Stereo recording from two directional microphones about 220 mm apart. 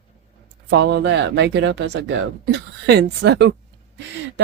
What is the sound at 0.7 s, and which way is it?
Speech, 50° right (ahead or behind).